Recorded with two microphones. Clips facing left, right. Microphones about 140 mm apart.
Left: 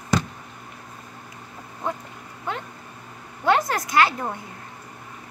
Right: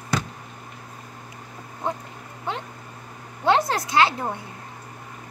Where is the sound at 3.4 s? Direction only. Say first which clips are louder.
Right 1 dB; 25° right (ahead or behind).